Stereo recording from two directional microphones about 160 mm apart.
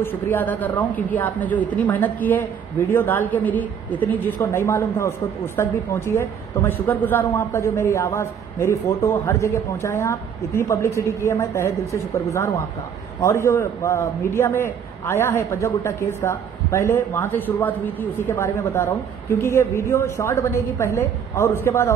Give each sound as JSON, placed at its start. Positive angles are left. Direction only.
{"t": 0.0, "sound": "a woman's voice", "side_deg": 10}